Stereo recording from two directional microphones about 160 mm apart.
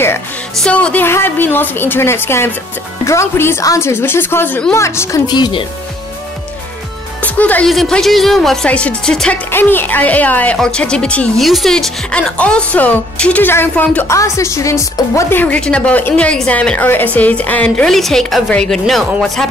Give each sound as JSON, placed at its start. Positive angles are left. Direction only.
{"t": 0.6, "sound": "speech", "side_deg": 5}
{"t": 7.2, "sound": "speech", "side_deg": 10}